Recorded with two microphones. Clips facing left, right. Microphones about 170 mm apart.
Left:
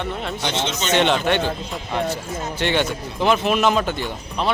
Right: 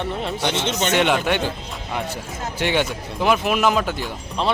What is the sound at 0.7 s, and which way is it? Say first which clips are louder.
Speech: right 3 dB; 60° right (ahead or behind).